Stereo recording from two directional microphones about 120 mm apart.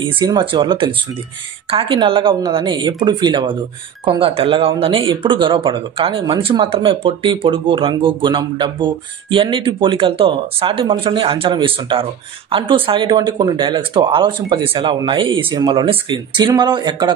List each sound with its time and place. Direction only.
0.0 s speech: 40° right (ahead or behind)